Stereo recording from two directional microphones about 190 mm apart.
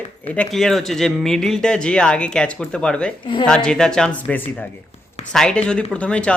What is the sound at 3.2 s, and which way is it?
Speech, 25° left (ahead or behind).